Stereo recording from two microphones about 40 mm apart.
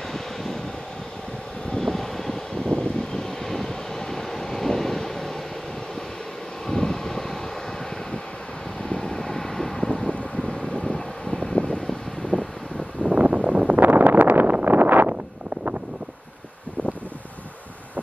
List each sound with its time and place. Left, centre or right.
0.1 s vehicle: centre
1.7 s vehicle: centre
2.6 s vehicle: left
6.7 s vehicle: centre
8.8 s vehicle: left
13.1 s a sound: right
13.4 s wind noise: right
13.7 s a sound: right